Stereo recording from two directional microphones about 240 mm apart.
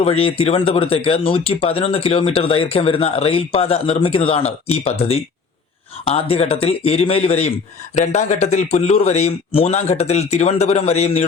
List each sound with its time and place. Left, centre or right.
0.0 s speech: left